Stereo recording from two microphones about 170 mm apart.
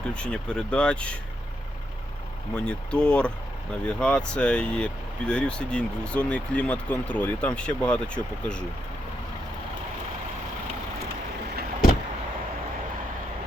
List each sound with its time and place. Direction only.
0.1 s speech: 5° left (ahead or behind)
2.6 s speech: 5° left (ahead or behind)